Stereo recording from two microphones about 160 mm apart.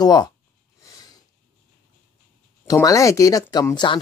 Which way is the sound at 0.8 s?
25° left (ahead or behind).